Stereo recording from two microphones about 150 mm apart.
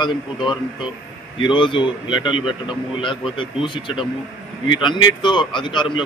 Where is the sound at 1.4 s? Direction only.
35° left (ahead or behind).